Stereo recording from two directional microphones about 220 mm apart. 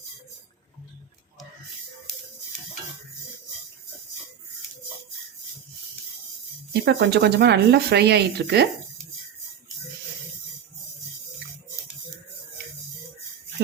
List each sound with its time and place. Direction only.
6.8 s speech: 45° right (ahead or behind)